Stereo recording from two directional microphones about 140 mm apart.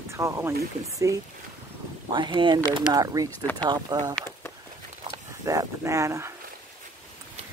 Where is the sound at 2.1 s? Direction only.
35° right (ahead or behind).